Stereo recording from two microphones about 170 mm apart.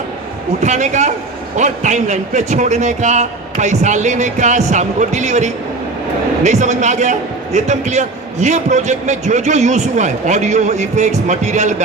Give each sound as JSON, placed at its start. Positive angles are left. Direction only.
{"t": 0.6, "sound": "a man's voice", "side_deg": -45}